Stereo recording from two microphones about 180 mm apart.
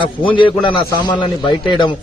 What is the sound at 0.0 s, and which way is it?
A man's voice, 30° left (ahead or behind).